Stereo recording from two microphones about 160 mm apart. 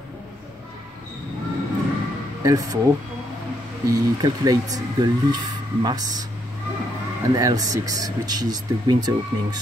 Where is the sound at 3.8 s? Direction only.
20° right (ahead or behind).